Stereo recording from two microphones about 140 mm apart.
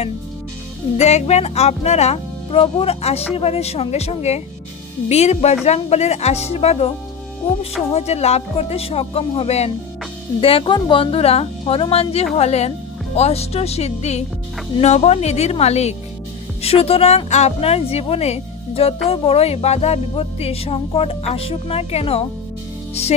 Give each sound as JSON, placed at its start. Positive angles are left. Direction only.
{"t": 0.9, "sound": "speech", "side_deg": 50}
{"t": 7.9, "sound": "speech", "side_deg": 50}